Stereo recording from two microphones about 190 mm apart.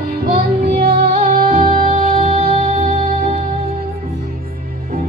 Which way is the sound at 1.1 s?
40° right (ahead or behind).